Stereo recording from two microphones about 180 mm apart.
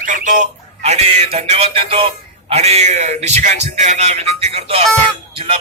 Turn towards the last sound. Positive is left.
turn(degrees=-30)  # may be behind; listen again after turning